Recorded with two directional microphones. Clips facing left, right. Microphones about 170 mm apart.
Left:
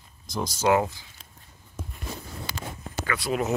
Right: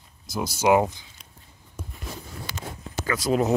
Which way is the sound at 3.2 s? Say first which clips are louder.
Right 5 dB; 35° right (ahead or behind).